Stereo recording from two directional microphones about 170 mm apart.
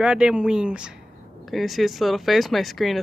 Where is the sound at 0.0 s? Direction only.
5° right (ahead or behind).